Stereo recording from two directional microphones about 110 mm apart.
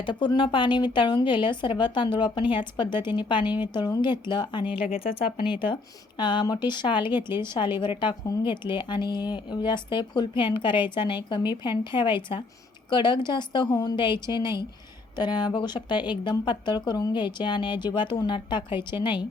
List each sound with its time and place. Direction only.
0.0 s speech: 45° left (ahead or behind)
6.1 s speech: 45° left (ahead or behind)